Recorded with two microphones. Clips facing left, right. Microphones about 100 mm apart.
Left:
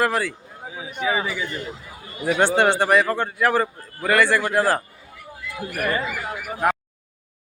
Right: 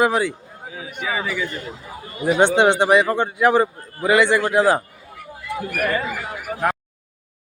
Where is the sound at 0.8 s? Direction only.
20° left (ahead or behind).